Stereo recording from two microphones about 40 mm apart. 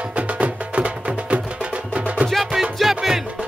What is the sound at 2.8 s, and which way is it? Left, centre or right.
Music, centre.